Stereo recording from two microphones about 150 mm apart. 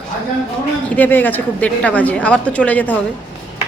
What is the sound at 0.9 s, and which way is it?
A woman's voice, 10° left (ahead or behind).